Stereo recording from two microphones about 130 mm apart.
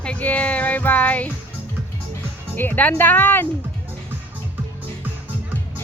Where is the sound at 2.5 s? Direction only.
15° left (ahead or behind).